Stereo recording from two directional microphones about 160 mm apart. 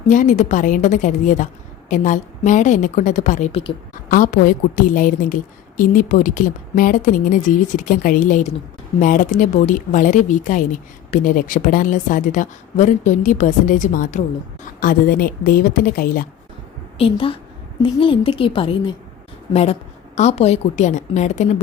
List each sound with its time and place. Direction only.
0.1 s a woman's voice: 50° left (ahead or behind)
4.1 s a woman's voice: 55° left (ahead or behind)
17.0 s a woman's voice: 35° left (ahead or behind)
20.1 s a woman's voice: 45° left (ahead or behind)